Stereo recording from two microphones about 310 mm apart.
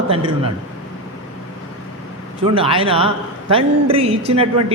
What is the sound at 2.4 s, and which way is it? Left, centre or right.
A man's voice, centre.